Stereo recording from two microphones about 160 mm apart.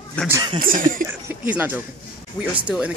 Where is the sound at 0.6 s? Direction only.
60° right (ahead or behind).